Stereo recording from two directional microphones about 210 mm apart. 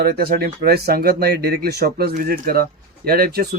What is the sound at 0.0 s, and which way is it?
Speech, 45° right (ahead or behind).